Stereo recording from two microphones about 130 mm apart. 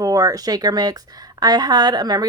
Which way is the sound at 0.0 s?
25° right (ahead or behind).